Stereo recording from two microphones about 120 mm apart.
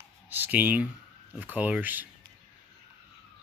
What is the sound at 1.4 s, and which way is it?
Speech, 15° right (ahead or behind).